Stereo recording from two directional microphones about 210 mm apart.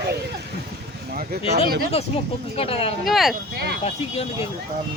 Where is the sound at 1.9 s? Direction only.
30° left (ahead or behind).